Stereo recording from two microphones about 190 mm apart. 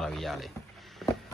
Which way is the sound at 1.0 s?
Centre (ahead or behind).